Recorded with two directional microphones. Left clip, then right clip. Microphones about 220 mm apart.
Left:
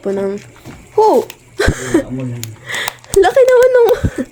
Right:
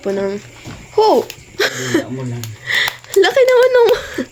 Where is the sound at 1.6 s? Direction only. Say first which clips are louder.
Left 2 dB; 20° left (ahead or behind).